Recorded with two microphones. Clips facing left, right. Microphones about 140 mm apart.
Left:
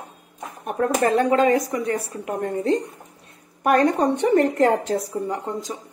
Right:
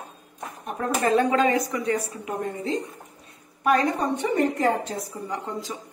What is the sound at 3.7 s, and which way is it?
A woman's voice, 65° left (ahead or behind).